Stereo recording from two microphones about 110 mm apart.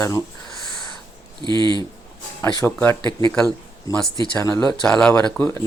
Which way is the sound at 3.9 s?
30° left (ahead or behind).